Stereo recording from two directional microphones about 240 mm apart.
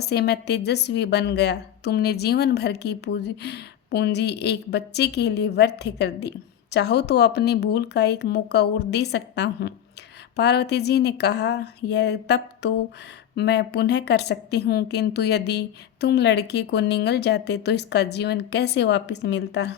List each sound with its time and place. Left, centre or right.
0.0 s a woman's voice: left